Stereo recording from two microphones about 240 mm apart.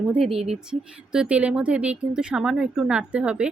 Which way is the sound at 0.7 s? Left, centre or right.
Centre.